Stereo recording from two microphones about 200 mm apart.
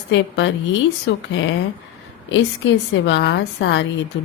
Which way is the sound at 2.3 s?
65° left (ahead or behind).